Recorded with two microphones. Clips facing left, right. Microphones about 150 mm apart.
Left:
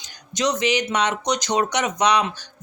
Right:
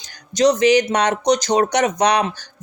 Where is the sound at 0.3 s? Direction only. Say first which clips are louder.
Right 8 dB; 35° right (ahead or behind).